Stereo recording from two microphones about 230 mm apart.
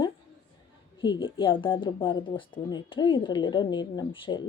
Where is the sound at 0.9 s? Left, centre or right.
Left.